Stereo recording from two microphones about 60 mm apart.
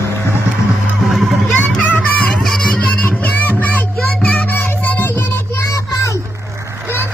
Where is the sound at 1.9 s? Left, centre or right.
Left.